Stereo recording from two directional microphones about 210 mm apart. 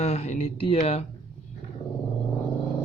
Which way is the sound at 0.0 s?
30° left (ahead or behind).